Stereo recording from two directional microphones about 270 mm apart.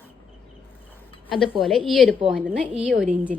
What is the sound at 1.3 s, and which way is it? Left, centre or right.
A woman's voice, centre.